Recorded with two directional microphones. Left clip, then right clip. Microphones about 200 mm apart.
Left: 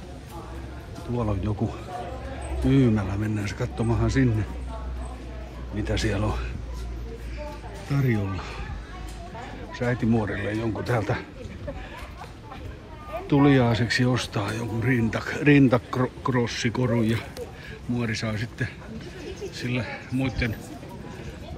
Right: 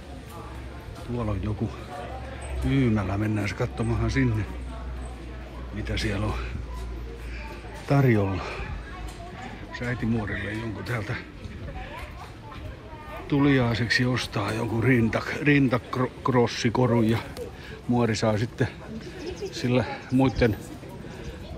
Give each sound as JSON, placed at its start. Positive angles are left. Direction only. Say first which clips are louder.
{"t": 1.1, "sound": "speech", "louder": "left 3 dB", "side_deg": 5}
{"t": 3.0, "sound": "speech", "louder": "right 2 dB", "side_deg": -5}
{"t": 5.8, "sound": "speech", "louder": "left 3 dB", "side_deg": 10}
{"t": 7.9, "sound": "speech", "louder": "right 5 dB", "side_deg": -10}
{"t": 9.7, "sound": "speech", "louder": "left 5 dB", "side_deg": 15}
{"t": 13.3, "sound": "speech", "louder": "left 3 dB", "side_deg": 10}